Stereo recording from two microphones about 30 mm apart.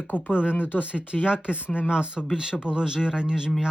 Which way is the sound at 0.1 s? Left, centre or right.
Left.